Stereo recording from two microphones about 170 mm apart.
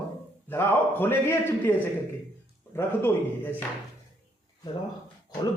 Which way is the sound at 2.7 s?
15° left (ahead or behind).